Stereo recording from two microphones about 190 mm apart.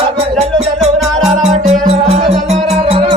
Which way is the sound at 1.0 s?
Centre (ahead or behind).